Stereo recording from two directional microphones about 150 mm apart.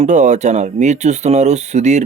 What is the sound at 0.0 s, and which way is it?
Speech, 55° right (ahead or behind).